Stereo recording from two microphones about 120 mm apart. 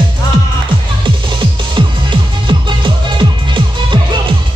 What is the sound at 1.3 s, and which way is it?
Music, 40° right (ahead or behind).